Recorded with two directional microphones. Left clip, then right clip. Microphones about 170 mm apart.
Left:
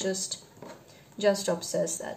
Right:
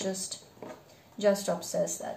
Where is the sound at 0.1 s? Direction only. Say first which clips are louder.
Left 4 dB; 45° left (ahead or behind).